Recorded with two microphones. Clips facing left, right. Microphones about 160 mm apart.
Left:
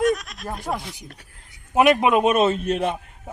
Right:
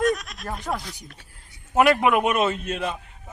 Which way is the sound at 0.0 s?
Centre (ahead or behind).